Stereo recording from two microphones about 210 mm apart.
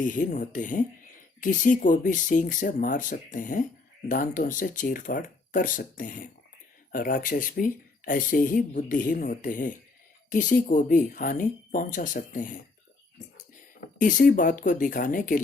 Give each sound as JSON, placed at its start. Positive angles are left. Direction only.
{"t": 0.0, "sound": "speech", "side_deg": 40}
{"t": 14.0, "sound": "speech", "side_deg": 40}